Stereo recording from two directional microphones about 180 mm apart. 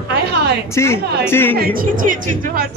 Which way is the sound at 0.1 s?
65° right (ahead or behind).